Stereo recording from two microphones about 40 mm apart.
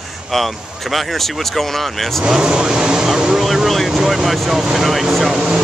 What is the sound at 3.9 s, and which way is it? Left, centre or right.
Vehicle, centre.